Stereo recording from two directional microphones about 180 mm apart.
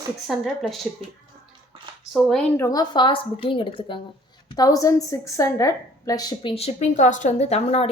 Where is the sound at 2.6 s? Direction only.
20° left (ahead or behind).